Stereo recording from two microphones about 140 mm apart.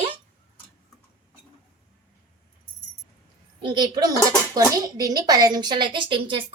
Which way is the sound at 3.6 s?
30° right (ahead or behind).